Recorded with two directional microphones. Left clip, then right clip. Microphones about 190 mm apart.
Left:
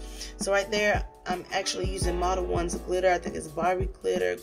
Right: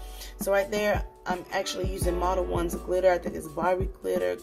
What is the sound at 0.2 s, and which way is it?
Speech, centre (ahead or behind).